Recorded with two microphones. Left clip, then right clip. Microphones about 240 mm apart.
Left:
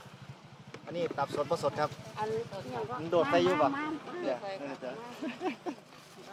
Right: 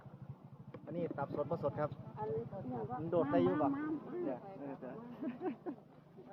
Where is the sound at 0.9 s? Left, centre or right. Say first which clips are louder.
Left 7 dB; centre.